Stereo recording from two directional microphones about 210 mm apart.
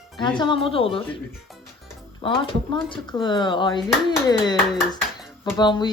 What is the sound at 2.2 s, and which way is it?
Speech, 25° left (ahead or behind).